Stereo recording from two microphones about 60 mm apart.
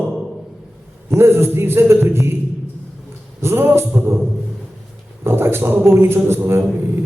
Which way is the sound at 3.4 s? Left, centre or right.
Right.